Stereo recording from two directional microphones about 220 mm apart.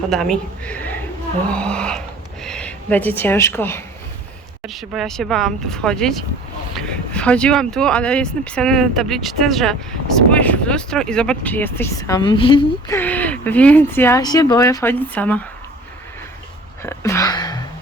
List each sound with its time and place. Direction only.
0.1 s speech: centre (ahead or behind)
4.6 s speech: centre (ahead or behind); by 13.0 s 20° left (ahead or behind)
13.0 s speech: 5° left (ahead or behind)
16.8 s a sound: 10° left (ahead or behind)